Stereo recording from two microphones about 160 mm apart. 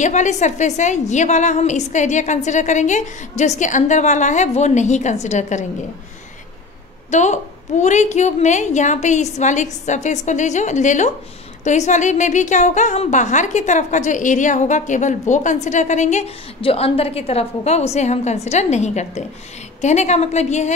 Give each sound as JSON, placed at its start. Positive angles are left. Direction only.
{"t": 0.0, "sound": "a woman's voice", "side_deg": 50}
{"t": 7.1, "sound": "a woman's voice", "side_deg": 45}